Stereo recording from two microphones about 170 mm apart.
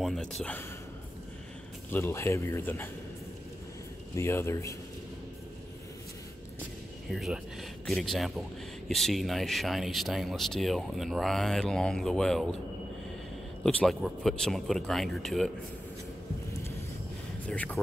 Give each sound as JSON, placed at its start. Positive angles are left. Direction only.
{"t": 0.0, "sound": "speech", "side_deg": 0}
{"t": 1.9, "sound": "speech", "side_deg": 15}
{"t": 4.1, "sound": "speech", "side_deg": 15}
{"t": 7.1, "sound": "speech", "side_deg": 0}
{"t": 13.7, "sound": "speech", "side_deg": 5}
{"t": 17.5, "sound": "speech", "side_deg": 10}